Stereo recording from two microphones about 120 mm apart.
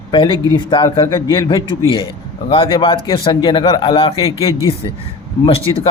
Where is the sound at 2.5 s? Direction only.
45° left (ahead or behind).